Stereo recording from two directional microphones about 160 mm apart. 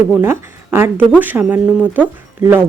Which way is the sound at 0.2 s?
15° right (ahead or behind).